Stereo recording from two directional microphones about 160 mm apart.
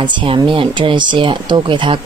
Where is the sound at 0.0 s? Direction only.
30° right (ahead or behind).